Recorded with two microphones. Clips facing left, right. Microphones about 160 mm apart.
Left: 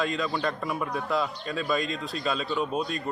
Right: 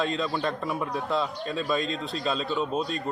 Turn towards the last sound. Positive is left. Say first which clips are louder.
# right 1 dB
turn(degrees=-35)  # may be behind; listen again after turning